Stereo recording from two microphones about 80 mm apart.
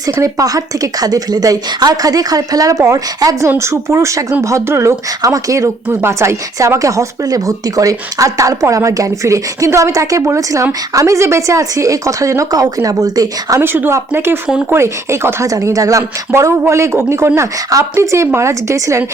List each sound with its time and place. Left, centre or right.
0.2 s speech: right
13.6 s speech: right
15.4 s speech: right